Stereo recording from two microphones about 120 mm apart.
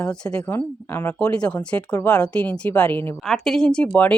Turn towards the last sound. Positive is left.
turn(degrees=5)  # may be behind; listen again after turning